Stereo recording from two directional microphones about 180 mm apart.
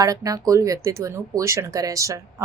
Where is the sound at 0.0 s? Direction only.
20° right (ahead or behind).